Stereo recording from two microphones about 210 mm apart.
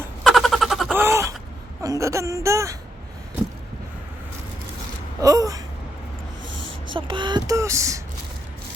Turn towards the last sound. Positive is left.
turn(degrees=-15)  # may be behind; listen again after turning